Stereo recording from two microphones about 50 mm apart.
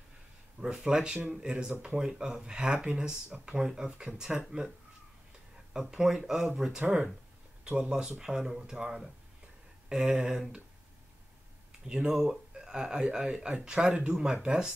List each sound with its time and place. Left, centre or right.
0.6 s speech: centre
5.7 s speech: centre
7.6 s speech: centre
11.8 s speech: centre